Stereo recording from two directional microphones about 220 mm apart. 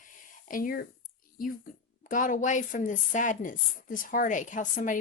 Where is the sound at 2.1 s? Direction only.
35° left (ahead or behind).